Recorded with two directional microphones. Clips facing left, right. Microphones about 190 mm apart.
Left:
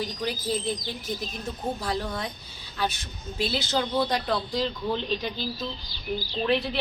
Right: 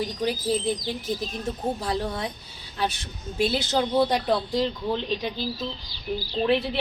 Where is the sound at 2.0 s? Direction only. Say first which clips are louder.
Right 2 dB; 25° right (ahead or behind).